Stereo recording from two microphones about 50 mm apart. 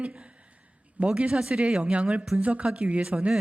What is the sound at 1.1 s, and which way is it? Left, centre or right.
Speech, centre.